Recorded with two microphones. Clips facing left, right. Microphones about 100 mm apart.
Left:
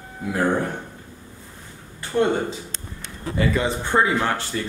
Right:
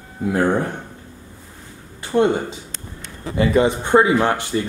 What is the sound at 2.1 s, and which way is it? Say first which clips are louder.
Speech: right 4 dB; 50° right (ahead or behind).